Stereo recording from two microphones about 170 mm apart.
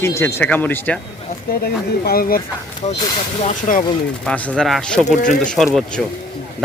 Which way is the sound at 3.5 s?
50° left (ahead or behind).